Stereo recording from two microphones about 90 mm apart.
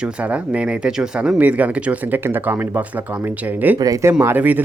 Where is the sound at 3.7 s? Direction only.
40° right (ahead or behind).